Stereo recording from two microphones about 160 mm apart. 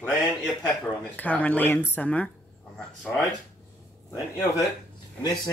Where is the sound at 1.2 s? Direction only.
10° left (ahead or behind).